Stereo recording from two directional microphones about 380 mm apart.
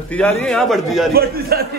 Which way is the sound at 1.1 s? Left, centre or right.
Right.